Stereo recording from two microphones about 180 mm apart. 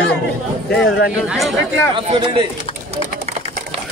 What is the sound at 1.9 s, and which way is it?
Speech, 35° right (ahead or behind).